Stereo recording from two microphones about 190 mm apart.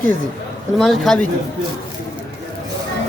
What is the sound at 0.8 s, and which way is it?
Speech, centre (ahead or behind).